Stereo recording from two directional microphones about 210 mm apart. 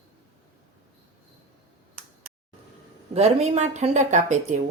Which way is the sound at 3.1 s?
30° right (ahead or behind).